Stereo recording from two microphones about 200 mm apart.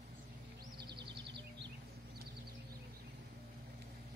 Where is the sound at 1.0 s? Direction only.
60° right (ahead or behind).